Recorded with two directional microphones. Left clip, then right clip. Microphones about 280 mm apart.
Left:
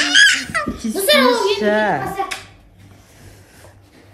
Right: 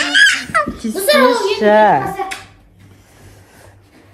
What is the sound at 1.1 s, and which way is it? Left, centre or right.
Speech, centre.